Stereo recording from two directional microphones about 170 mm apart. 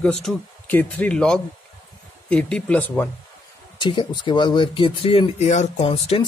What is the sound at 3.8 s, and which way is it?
Speech, 25° left (ahead or behind).